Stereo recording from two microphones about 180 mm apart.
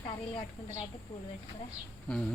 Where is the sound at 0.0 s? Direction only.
25° left (ahead or behind).